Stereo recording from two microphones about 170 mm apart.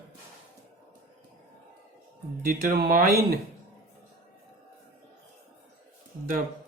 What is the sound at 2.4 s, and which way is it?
Speech, 60° right (ahead or behind).